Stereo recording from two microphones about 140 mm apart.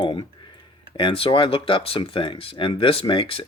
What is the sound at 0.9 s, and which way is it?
Speech, 40° left (ahead or behind).